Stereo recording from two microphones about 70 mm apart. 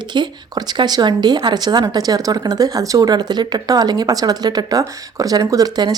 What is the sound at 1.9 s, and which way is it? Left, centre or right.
Speech, right.